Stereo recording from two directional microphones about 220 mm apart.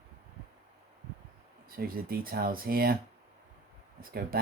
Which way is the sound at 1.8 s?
40° right (ahead or behind).